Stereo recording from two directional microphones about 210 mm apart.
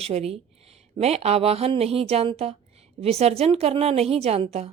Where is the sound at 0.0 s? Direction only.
30° right (ahead or behind).